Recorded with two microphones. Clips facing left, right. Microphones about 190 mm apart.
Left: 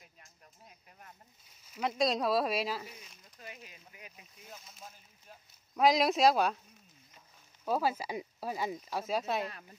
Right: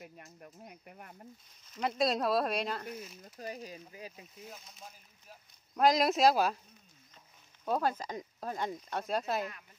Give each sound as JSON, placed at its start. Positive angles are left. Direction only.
{"t": 0.0, "sound": "speech", "side_deg": -60}
{"t": 1.7, "sound": "speech", "side_deg": 0}
{"t": 3.3, "sound": "speech", "side_deg": -40}
{"t": 4.5, "sound": "speech", "side_deg": 0}
{"t": 7.6, "sound": "speech", "side_deg": 5}